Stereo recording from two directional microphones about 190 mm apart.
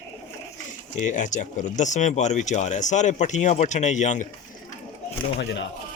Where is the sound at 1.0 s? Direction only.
40° left (ahead or behind).